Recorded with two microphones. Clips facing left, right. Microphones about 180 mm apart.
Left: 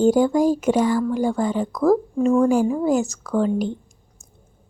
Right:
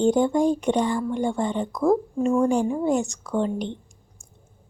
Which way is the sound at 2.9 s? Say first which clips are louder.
Left 3 dB; centre (ahead or behind).